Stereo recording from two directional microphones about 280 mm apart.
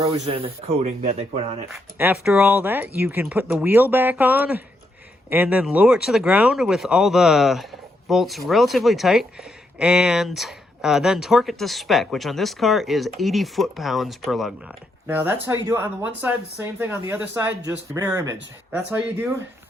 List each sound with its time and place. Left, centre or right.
0.0 s speech: centre
1.7 s speech: centre